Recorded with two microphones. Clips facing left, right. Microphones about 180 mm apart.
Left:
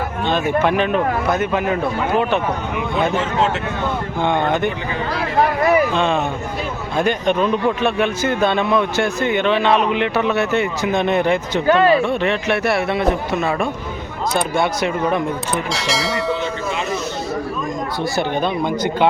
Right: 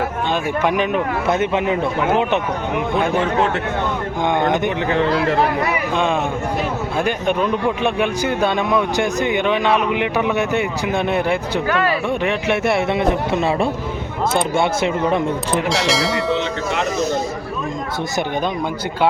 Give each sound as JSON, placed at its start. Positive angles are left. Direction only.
{"t": 0.3, "sound": "a man's voice", "side_deg": -10}
{"t": 1.3, "sound": "speech", "side_deg": -25}
{"t": 4.2, "sound": "a man's voice", "side_deg": -15}
{"t": 5.9, "sound": "a man's voice", "side_deg": -10}
{"t": 11.6, "sound": "speech", "side_deg": 30}
{"t": 12.0, "sound": "speech", "side_deg": -10}
{"t": 15.7, "sound": "speech", "side_deg": 0}